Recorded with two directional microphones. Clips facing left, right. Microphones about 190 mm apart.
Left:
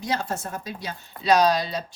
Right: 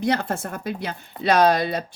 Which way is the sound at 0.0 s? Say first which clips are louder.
Right 5 dB; 55° right (ahead or behind).